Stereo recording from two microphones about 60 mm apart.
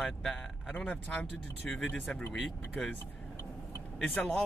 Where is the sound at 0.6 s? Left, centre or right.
Centre.